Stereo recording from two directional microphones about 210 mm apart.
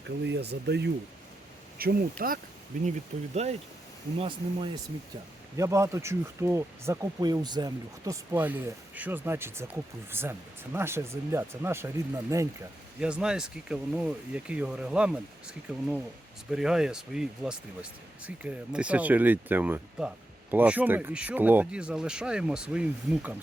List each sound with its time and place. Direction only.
0.3 s speech: 50° right (ahead or behind)
4.2 s speech: 25° right (ahead or behind); by 23.3 s 5° right (ahead or behind)